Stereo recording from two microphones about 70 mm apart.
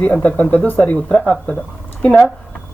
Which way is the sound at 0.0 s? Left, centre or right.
Centre.